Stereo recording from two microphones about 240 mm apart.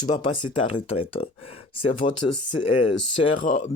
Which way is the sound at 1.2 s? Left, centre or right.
Left.